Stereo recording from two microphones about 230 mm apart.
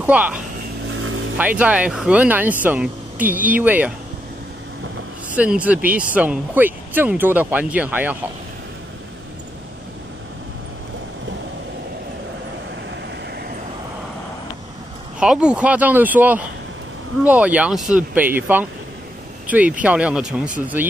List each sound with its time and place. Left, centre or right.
0.0 s speech: centre
0.9 s vehicle: right
1.4 s speech: centre
5.3 s speech: centre
15.1 s speech: centre